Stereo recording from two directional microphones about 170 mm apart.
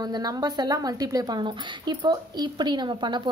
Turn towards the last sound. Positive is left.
turn(degrees=-25)  # may be behind; listen again after turning